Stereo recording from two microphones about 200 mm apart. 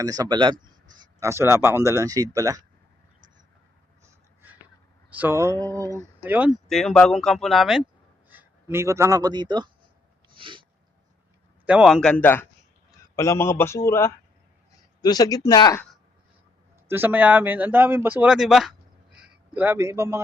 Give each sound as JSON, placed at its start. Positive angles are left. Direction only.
{"t": 0.0, "sound": "speech", "side_deg": -20}
{"t": 5.1, "sound": "a man's voice", "side_deg": -10}
{"t": 10.3, "sound": "a sound", "side_deg": -25}
{"t": 11.6, "sound": "a man's voice", "side_deg": -5}
{"t": 16.9, "sound": "a man's voice", "side_deg": -10}